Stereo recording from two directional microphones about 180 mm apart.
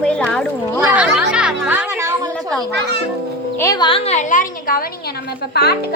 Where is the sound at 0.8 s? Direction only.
5° right (ahead or behind).